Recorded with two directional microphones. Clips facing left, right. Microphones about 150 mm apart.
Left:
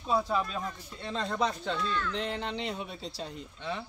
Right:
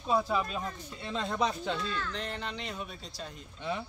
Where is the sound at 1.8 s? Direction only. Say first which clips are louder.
Left 3 dB; 35° right (ahead or behind).